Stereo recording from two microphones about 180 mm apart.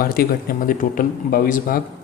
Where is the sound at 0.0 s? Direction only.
55° left (ahead or behind).